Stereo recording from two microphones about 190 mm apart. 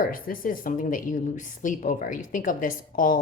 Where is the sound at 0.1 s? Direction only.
45° left (ahead or behind).